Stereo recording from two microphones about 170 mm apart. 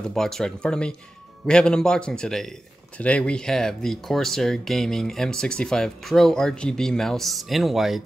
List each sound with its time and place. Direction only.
0.0 s speech: 5° left (ahead or behind)